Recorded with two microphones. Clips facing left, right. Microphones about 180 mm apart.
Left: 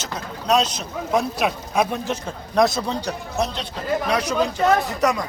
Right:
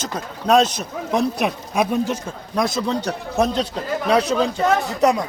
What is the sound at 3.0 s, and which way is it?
Speech, 55° right (ahead or behind).